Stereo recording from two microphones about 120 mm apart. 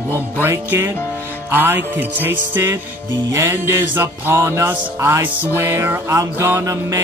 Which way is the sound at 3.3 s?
20° right (ahead or behind).